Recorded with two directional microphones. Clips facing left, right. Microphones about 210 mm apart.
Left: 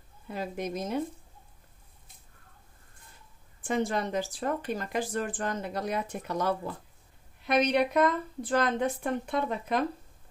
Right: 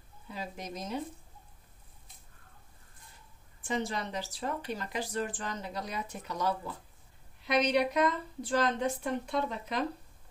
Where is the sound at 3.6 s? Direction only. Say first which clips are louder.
Left 5 dB; 55° left (ahead or behind).